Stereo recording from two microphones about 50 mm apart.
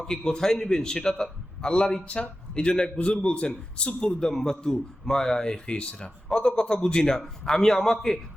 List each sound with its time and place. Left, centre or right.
0.0 s speech: centre